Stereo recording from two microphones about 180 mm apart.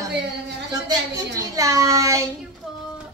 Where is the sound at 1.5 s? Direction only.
20° right (ahead or behind).